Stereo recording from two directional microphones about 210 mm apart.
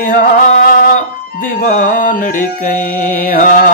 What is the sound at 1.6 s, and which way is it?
Mantra, 40° left (ahead or behind).